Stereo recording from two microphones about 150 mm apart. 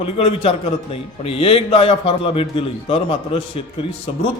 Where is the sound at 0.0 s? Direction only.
40° left (ahead or behind).